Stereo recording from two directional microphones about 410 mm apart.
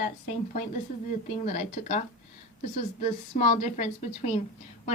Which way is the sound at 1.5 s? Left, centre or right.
Centre.